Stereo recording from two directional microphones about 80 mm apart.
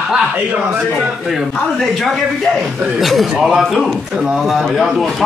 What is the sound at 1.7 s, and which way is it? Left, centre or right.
A man's voice, centre.